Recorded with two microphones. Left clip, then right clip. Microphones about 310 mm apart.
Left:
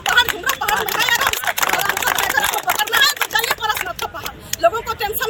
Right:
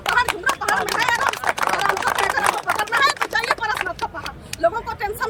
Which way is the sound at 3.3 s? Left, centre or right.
Centre.